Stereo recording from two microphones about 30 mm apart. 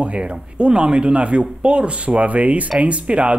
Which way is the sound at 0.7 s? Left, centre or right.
Right.